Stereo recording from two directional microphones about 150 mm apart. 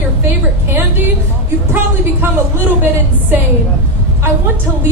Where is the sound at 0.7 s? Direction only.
15° right (ahead or behind).